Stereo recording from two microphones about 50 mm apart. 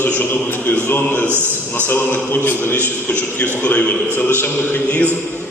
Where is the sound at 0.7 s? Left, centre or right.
Left.